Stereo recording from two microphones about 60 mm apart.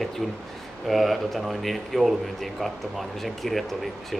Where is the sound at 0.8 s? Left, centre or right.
Centre.